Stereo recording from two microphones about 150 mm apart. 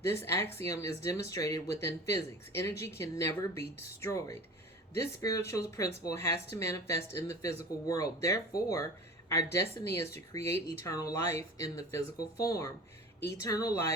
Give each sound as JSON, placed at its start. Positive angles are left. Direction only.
{"t": 0.0, "sound": "speech", "side_deg": 20}